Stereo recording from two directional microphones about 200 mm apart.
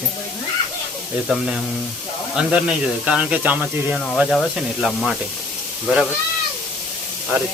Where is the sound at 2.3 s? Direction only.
5° right (ahead or behind).